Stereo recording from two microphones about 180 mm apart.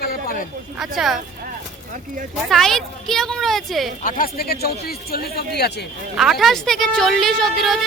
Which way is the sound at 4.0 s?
55° left (ahead or behind).